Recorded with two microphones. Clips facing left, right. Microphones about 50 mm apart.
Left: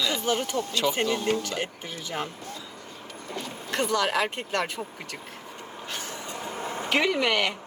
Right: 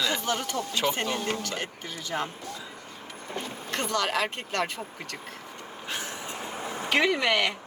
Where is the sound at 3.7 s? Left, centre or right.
Centre.